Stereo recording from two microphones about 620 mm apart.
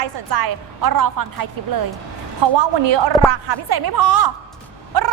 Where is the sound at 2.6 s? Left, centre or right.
Right.